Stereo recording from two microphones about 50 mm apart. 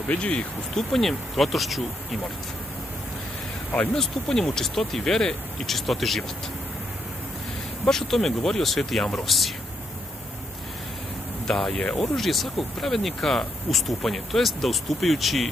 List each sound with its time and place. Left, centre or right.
0.1 s speech: left
0.7 s speech: centre
3.9 s speech: centre
7.8 s speech: centre
11.4 s speech: centre